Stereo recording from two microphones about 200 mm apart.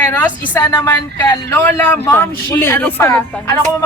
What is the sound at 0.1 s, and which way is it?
A woman's voice, 15° left (ahead or behind).